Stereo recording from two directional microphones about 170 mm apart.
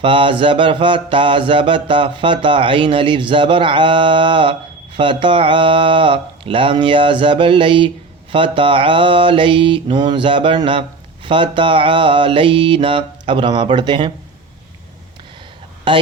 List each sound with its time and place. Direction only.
0.0 s mantra: 30° right (ahead or behind)
15.9 s speech: 30° right (ahead or behind)